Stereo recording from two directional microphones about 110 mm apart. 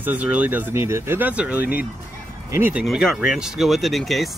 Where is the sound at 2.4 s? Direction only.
20° right (ahead or behind).